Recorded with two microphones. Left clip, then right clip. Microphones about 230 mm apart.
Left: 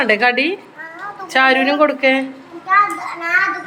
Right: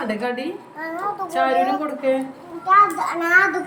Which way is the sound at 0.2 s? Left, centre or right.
Left.